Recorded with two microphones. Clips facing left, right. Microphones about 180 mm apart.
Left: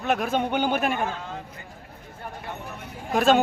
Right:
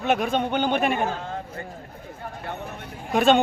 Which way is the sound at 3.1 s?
Centre (ahead or behind).